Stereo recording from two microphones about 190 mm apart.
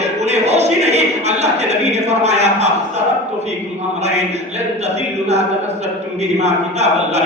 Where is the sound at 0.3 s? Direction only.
35° right (ahead or behind).